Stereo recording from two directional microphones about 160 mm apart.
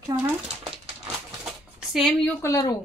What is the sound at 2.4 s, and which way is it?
Speech, 15° left (ahead or behind).